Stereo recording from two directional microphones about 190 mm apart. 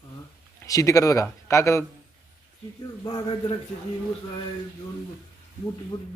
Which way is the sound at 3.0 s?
25° left (ahead or behind).